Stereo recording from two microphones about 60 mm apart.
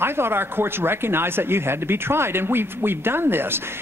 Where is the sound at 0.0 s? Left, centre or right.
Right.